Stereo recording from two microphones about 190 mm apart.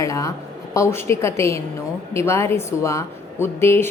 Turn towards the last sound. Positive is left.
turn(degrees=10)  # may be behind; listen again after turning